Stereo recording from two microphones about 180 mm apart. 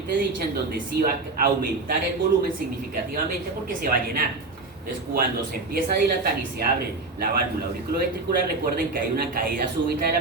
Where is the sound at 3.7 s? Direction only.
50° right (ahead or behind).